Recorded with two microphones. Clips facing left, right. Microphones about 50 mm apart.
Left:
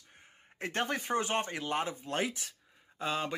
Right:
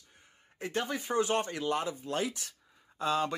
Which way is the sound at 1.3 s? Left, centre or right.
Left.